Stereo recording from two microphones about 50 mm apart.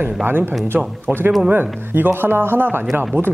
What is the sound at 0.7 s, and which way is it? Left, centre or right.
Speech, centre.